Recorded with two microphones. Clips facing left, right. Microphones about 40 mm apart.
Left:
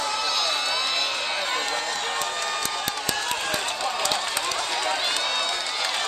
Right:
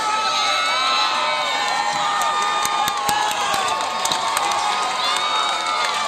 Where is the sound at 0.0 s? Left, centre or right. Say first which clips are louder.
Right 6 dB; right.